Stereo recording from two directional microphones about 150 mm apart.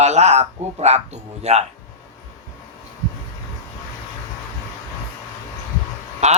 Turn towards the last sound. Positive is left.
turn(degrees=-50)  # may be behind; listen again after turning